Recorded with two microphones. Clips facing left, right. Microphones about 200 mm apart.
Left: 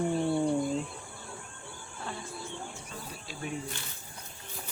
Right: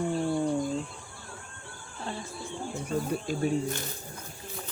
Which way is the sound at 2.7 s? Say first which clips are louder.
Right 14 dB; 45° right (ahead or behind).